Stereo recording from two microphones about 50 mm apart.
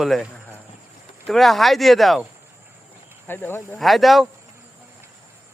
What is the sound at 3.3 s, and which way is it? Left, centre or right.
Speech, left.